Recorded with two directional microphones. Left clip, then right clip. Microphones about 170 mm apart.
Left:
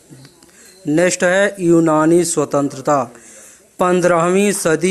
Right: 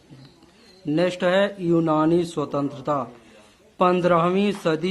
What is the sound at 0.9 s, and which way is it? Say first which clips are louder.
Speech: left 7 dB; 35° left (ahead or behind).